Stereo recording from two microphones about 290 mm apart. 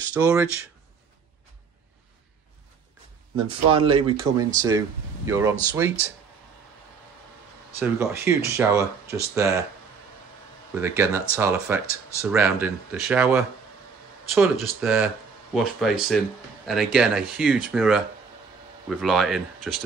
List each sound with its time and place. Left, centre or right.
0.1 s speech: centre
3.3 s speech: centre
7.8 s speech: centre
10.7 s speech: centre